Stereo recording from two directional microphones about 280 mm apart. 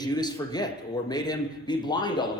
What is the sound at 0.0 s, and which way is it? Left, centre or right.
A man's voice, centre.